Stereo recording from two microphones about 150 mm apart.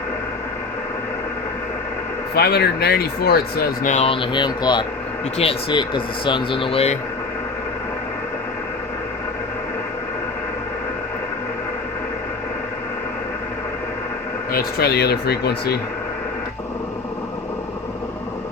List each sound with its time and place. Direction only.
2.3 s speech: 90° left
3.8 s speech: 45° left (ahead or behind)
14.5 s speech: 90° left